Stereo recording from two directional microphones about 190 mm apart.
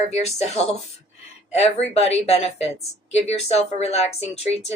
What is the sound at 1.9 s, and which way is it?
Speech, 35° left (ahead or behind).